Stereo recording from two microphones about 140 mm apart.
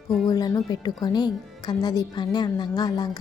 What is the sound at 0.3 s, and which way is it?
A woman's voice, 30° left (ahead or behind).